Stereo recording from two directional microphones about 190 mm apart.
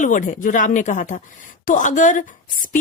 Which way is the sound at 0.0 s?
45° left (ahead or behind).